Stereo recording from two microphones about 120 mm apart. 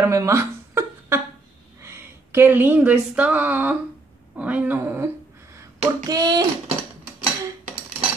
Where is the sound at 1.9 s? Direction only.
20° right (ahead or behind).